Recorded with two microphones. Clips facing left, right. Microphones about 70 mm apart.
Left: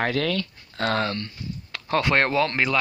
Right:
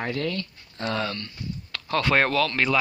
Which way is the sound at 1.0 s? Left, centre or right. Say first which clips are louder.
Left 3 dB; left.